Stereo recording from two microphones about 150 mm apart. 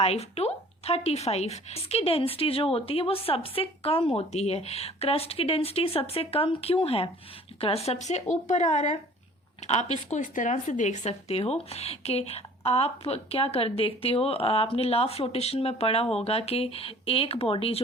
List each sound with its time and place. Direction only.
0.0 s speech: 45° left (ahead or behind)